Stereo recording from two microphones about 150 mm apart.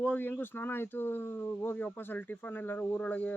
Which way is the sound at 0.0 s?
10° left (ahead or behind).